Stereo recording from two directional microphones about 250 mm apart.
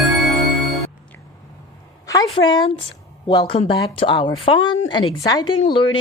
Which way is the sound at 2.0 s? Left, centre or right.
Centre.